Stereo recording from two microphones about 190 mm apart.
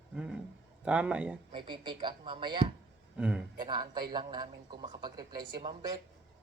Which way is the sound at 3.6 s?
25° right (ahead or behind).